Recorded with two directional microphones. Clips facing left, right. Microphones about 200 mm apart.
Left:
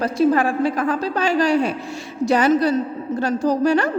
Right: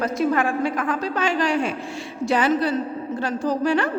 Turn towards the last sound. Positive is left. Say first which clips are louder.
# left 4 dB
turn(degrees=40)  # may be behind; listen again after turning